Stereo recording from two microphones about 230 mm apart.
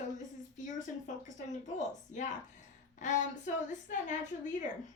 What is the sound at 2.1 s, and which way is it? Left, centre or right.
A woman's voice, left.